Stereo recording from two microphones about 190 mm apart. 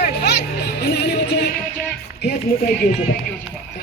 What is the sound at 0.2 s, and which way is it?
Music, 60° left (ahead or behind).